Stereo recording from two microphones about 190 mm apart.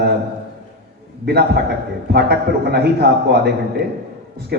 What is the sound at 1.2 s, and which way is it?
A man's voice, 60° right (ahead or behind).